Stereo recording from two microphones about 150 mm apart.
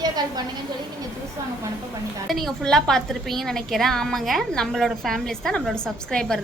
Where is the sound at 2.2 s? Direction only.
Centre (ahead or behind).